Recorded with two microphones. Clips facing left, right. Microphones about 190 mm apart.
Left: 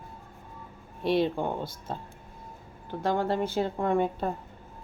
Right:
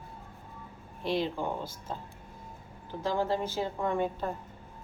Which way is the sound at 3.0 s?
60° left (ahead or behind).